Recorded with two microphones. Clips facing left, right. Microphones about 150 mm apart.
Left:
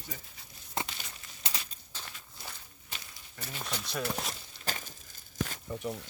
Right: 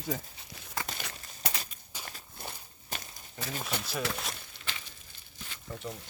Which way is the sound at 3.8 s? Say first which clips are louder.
Right 1 dB; 5° right (ahead or behind).